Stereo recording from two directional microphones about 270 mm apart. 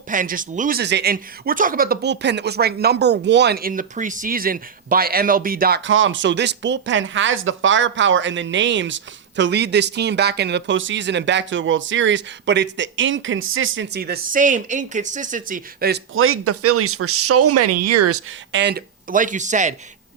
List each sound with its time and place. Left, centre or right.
0.1 s speech: right
16.1 s speech: right
18.5 s speech: right